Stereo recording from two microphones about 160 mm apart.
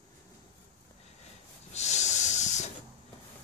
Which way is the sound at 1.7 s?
45° left (ahead or behind).